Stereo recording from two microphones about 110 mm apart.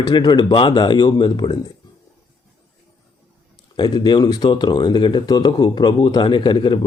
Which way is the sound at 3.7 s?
40° left (ahead or behind).